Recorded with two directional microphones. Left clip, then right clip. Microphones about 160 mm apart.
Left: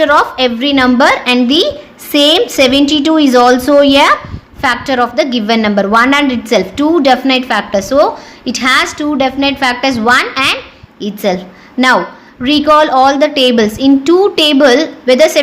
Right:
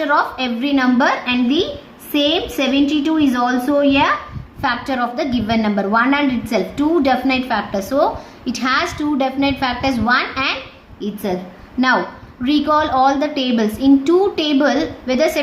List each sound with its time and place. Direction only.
0.0 s a woman's voice: 50° left (ahead or behind)
12.4 s a woman's voice: 50° left (ahead or behind)